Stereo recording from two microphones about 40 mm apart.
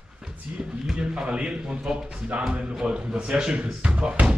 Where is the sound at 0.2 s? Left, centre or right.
Centre.